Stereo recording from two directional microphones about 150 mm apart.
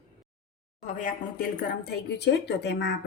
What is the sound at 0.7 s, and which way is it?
Speech, 60° left (ahead or behind).